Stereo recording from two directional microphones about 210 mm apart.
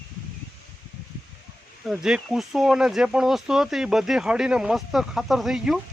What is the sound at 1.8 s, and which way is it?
Speech, 5° right (ahead or behind).